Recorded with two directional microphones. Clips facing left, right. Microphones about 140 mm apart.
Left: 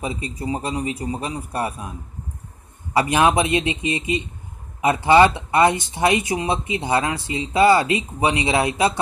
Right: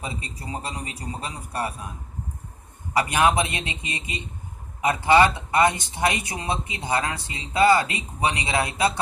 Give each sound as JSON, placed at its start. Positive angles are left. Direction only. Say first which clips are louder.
{"t": 0.0, "sound": "speech", "louder": "left 7 dB", "side_deg": 25}
{"t": 2.9, "sound": "speech", "louder": "left 3 dB", "side_deg": 25}